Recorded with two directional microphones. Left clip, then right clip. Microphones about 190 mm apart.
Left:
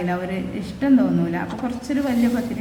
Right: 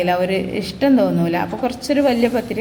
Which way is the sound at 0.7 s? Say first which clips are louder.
Right 3 dB; 30° right (ahead or behind).